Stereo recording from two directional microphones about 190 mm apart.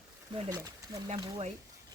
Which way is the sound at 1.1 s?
30° right (ahead or behind).